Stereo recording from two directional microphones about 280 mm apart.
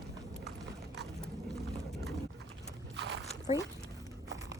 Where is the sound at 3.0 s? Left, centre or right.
Right.